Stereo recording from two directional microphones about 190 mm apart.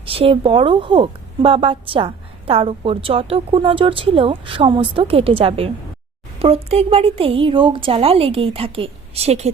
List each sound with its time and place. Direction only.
0.0 s speech: 30° right (ahead or behind)